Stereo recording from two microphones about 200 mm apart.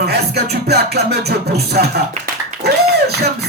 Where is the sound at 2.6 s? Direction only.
55° right (ahead or behind).